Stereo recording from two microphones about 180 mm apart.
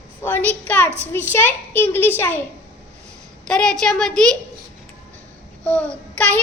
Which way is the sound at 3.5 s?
5° left (ahead or behind).